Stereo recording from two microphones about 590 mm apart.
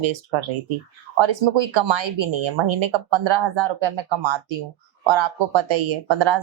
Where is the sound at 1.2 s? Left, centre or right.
Right.